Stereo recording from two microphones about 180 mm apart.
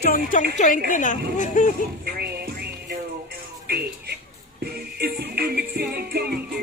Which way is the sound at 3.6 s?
65° right (ahead or behind).